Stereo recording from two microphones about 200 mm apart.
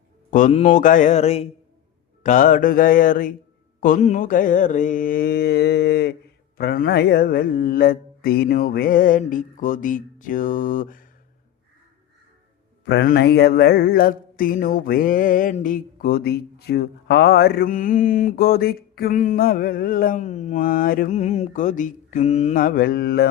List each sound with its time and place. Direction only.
0.3 s mantra: 40° left (ahead or behind)
12.9 s mantra: 55° left (ahead or behind)